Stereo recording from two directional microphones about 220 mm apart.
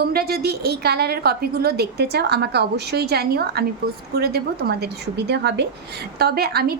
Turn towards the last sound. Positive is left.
turn(degrees=-45)  # may be behind; listen again after turning